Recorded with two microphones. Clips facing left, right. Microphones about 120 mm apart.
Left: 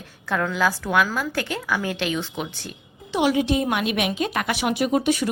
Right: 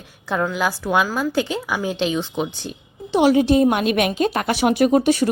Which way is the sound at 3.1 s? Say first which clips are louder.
Right 6 dB; 35° right (ahead or behind).